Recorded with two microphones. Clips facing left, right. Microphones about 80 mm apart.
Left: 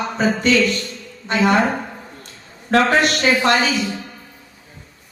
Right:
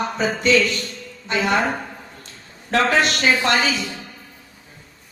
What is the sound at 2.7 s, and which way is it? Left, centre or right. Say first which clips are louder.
A woman's voice: left 3 dB; left.